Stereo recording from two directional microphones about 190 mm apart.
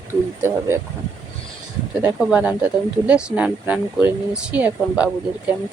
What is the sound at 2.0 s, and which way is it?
Speech, 5° right (ahead or behind).